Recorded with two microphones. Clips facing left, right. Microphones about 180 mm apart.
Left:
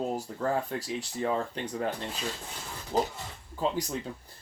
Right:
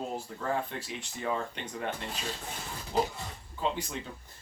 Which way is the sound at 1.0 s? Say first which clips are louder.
Left 3 dB; 35° left (ahead or behind).